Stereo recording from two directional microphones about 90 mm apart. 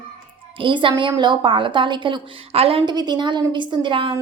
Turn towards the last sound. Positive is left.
turn(degrees=-70)  # may be behind; listen again after turning